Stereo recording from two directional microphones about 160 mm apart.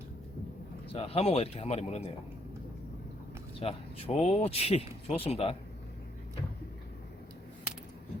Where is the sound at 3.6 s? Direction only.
35° left (ahead or behind).